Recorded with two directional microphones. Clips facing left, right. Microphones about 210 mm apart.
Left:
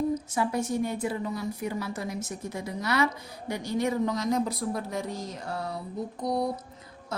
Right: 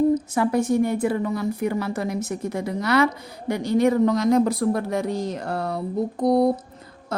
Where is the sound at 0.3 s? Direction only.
65° right (ahead or behind).